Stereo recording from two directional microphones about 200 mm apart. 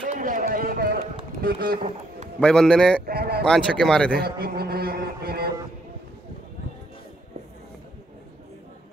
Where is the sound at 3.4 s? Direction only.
5° left (ahead or behind).